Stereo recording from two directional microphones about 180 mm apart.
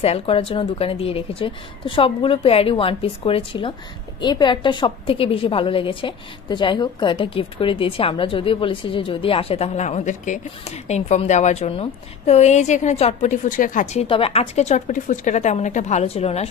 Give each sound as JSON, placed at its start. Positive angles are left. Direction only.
{"t": 0.0, "sound": "a woman's voice", "side_deg": 35}
{"t": 14.0, "sound": "a woman's voice", "side_deg": 30}